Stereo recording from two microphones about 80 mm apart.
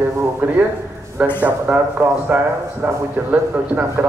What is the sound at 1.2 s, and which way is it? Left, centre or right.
A man's voice, centre.